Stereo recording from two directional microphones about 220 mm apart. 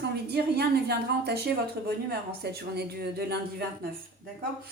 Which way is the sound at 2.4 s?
45° right (ahead or behind).